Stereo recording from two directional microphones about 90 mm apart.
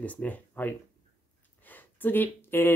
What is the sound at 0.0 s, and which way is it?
Speech, 15° left (ahead or behind).